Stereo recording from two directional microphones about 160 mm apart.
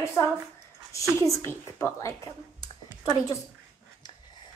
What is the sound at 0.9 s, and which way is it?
A woman's voice, 20° left (ahead or behind).